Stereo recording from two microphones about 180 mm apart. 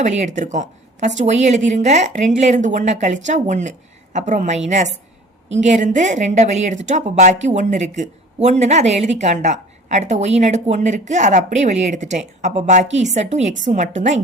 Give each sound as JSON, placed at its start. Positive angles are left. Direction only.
{"t": 0.0, "sound": "speech", "side_deg": -40}